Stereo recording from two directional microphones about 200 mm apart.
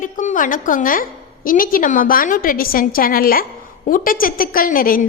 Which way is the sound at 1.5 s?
45° left (ahead or behind).